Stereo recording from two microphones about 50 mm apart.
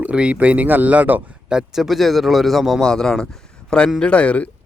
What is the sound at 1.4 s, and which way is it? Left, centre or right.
Speech, centre.